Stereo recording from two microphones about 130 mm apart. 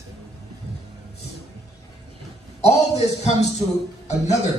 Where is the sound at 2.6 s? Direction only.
55° left (ahead or behind).